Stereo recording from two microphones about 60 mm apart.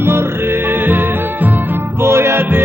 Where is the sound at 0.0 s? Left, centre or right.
Right.